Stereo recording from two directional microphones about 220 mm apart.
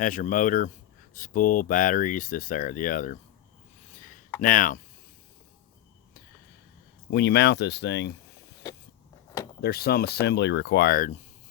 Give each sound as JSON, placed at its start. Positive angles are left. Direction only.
{"t": 0.0, "sound": "speech", "side_deg": 35}
{"t": 4.4, "sound": "speech", "side_deg": 40}
{"t": 7.1, "sound": "speech", "side_deg": 50}
{"t": 9.6, "sound": "speech", "side_deg": 45}